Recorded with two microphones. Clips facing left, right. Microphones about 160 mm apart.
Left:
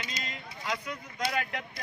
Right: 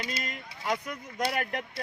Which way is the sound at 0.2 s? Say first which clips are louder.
Right 3 dB; 30° right (ahead or behind).